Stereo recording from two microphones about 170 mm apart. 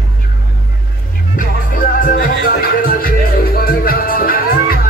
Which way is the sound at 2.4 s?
60° left (ahead or behind).